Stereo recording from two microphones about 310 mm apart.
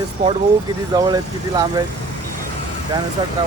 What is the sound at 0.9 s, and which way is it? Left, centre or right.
Speech, centre.